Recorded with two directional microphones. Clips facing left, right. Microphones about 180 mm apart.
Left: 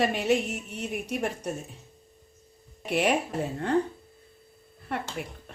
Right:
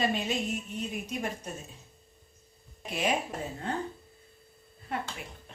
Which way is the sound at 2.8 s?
70° left (ahead or behind).